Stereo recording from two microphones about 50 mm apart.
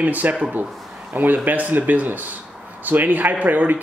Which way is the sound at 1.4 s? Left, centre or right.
Right.